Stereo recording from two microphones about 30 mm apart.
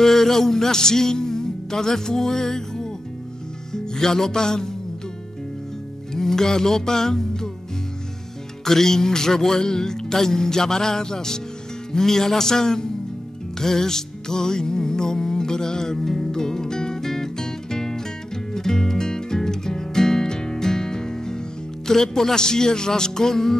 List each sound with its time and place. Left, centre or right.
0.0 s music: centre
6.1 s speech: centre
8.6 s speech: centre
16.3 s music: centre